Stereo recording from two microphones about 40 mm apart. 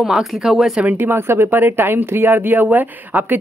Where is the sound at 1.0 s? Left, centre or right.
Right.